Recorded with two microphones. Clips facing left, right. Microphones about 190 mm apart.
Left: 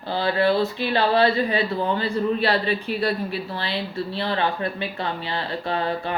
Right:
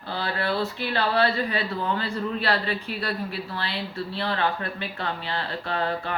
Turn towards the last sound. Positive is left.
turn(degrees=15)  # may be behind; listen again after turning